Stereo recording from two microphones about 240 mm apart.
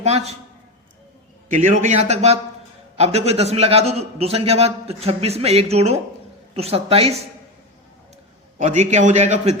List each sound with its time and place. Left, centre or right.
0.0 s a man's voice: right
1.5 s a man's voice: right
8.5 s a man's voice: right